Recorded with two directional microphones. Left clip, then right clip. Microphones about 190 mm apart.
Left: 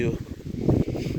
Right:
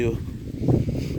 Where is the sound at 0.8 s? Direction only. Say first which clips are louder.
Left 1 dB; 20° right (ahead or behind).